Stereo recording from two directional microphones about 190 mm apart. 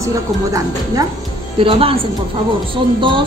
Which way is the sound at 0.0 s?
15° right (ahead or behind).